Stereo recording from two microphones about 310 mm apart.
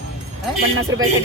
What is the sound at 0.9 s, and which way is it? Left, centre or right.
Speech, right.